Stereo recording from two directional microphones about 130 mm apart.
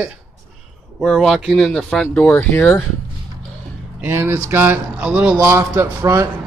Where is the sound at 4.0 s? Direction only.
15° right (ahead or behind).